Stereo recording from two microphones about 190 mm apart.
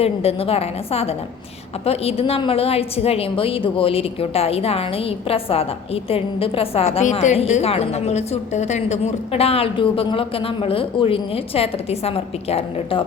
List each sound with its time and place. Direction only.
0.0 s a woman's voice: 30° left (ahead or behind)